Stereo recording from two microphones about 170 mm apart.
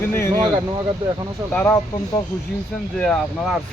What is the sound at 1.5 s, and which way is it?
Speech, 15° left (ahead or behind).